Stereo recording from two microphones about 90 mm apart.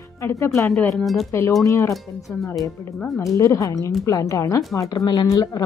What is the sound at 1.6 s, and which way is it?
Speech, 35° left (ahead or behind).